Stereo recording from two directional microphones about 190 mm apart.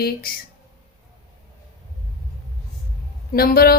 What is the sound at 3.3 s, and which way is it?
Speech, 50° left (ahead or behind).